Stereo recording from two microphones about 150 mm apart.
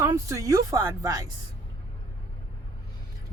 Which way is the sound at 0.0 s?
20° right (ahead or behind).